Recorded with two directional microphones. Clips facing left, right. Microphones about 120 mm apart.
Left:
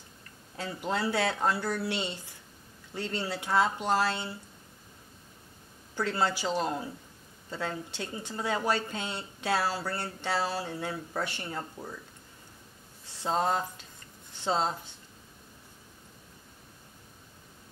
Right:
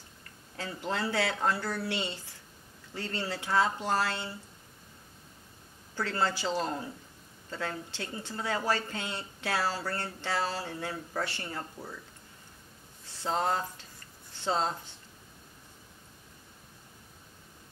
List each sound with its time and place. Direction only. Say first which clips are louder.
0.6 s speech: left 2 dB; 15° left (ahead or behind)
5.9 s speech: left 2 dB; 15° left (ahead or behind)
13.2 s speech: left 2 dB; 15° left (ahead or behind)